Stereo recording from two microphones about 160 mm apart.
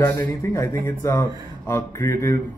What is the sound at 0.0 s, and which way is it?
Speech, 15° left (ahead or behind).